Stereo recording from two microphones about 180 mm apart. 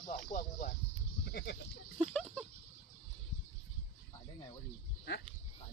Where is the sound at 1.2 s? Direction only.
70° left (ahead or behind).